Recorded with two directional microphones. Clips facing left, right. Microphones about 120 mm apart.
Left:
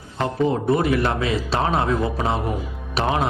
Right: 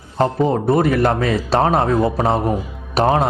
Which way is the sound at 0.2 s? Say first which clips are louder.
Right 4 dB; 40° right (ahead or behind).